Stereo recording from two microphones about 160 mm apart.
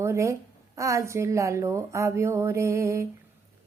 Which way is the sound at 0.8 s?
20° right (ahead or behind).